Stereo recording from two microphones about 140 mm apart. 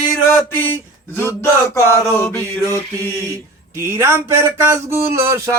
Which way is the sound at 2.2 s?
20° left (ahead or behind).